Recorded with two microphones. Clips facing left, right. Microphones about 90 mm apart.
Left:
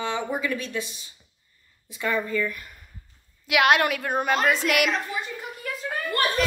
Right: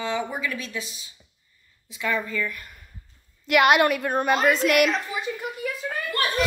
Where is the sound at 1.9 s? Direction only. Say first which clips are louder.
Left 1 dB; 35° left (ahead or behind).